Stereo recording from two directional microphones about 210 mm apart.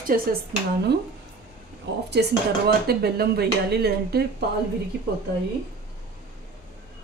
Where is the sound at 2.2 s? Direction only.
55° right (ahead or behind).